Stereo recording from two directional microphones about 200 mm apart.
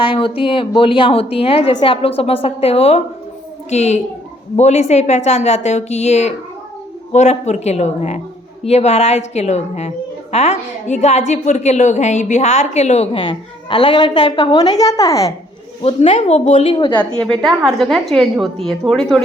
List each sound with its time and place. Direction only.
0.0 s a woman's voice: 25° left (ahead or behind)
15.8 s a woman's voice: 30° left (ahead or behind)
17.1 s a woman's voice: 25° right (ahead or behind)
17.4 s a woman's voice: centre (ahead or behind)